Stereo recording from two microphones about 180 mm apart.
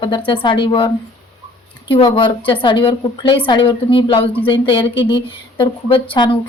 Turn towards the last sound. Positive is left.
turn(degrees=30)  # may be behind; listen again after turning